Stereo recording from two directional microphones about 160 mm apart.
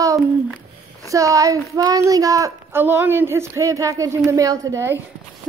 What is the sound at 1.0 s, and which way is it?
A woman's voice, 20° right (ahead or behind).